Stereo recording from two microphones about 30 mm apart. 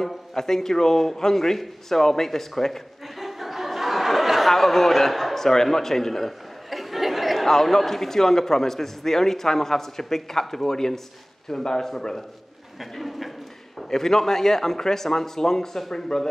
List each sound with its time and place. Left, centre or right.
0.0 s a man's voice: centre
3.2 s a sound: centre
4.6 s a man's voice: centre
6.7 s chatter: centre
7.4 s a man's voice: centre
12.9 s speech: centre
13.8 s a man's voice: centre